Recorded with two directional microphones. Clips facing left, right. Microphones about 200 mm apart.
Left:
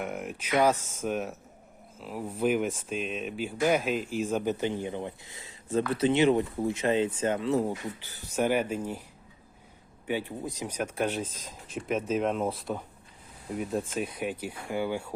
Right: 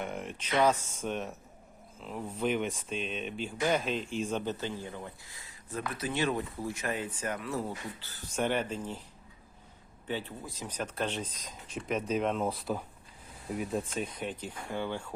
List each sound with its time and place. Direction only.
0.0 s speech: 5° left (ahead or behind)
10.1 s speech: 10° left (ahead or behind)